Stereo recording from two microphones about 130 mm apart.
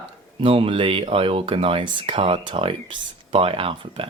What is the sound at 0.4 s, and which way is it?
Speech, 45° right (ahead or behind).